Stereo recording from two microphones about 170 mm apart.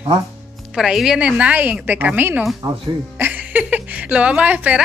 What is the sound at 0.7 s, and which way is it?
A woman's voice, 5° right (ahead or behind).